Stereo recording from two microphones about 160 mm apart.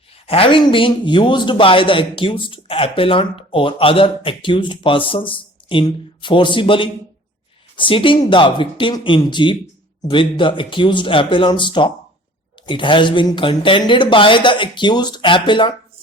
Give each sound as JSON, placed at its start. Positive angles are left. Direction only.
{"t": 0.3, "sound": "a man's voice", "side_deg": 35}